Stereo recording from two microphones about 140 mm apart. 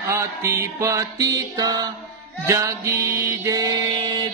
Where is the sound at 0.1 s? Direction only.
20° right (ahead or behind).